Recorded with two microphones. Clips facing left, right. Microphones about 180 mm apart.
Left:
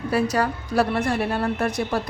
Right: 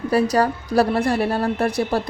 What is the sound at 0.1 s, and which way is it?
Speech, 35° right (ahead or behind).